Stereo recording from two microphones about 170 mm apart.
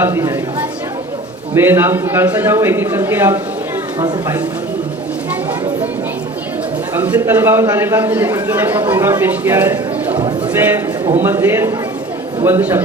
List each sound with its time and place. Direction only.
0.0 s a man's voice: 15° right (ahead or behind)
1.5 s a man's voice: 15° right (ahead or behind)
6.9 s a man's voice: 10° right (ahead or behind)